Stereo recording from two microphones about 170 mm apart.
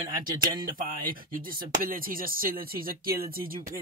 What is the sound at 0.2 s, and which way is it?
Speech, 55° right (ahead or behind).